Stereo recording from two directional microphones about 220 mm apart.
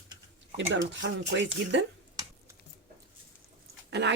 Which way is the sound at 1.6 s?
55° right (ahead or behind).